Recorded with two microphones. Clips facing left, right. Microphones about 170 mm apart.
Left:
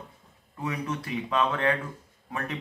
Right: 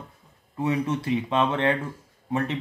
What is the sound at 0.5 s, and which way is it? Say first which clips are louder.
A man's voice: right 7 dB; 25° right (ahead or behind).